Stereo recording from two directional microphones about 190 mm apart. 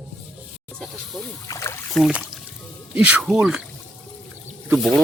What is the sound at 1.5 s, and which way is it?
Boat, 15° left (ahead or behind).